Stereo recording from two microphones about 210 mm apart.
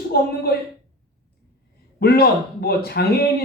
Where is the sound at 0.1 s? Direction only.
50° left (ahead or behind).